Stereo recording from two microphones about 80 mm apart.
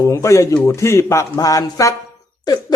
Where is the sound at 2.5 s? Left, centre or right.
Left.